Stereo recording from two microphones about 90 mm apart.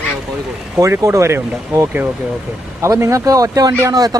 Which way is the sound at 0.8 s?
35° right (ahead or behind).